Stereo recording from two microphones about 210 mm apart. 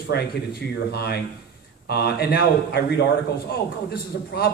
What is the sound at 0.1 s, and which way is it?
A man's voice, 50° left (ahead or behind).